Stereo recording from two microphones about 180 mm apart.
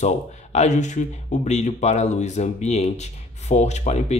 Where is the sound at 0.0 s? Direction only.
40° left (ahead or behind).